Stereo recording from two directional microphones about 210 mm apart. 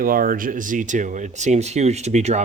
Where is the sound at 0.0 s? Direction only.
40° right (ahead or behind).